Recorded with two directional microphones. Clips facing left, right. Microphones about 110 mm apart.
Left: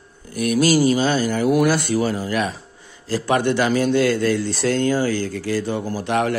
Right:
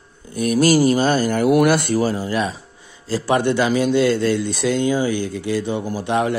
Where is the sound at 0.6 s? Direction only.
45° right (ahead or behind).